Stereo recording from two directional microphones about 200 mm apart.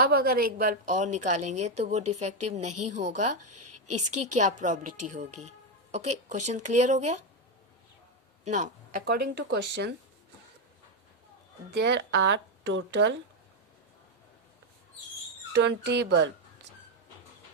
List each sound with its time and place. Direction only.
0.0 s a woman's voice: 50° right (ahead or behind)
8.4 s speech: 40° right (ahead or behind); by 9.9 s 60° right (ahead or behind)
11.7 s speech: 55° right (ahead or behind)
15.5 s speech: 60° right (ahead or behind)